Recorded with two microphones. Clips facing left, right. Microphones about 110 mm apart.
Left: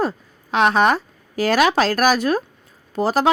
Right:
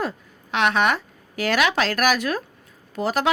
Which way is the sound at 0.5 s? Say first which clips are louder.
Left 4 dB; 35° left (ahead or behind).